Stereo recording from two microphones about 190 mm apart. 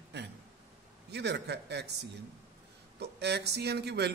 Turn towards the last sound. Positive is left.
turn(degrees=-60)  # may be behind; listen again after turning